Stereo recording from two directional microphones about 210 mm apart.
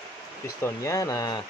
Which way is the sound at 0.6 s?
15° left (ahead or behind).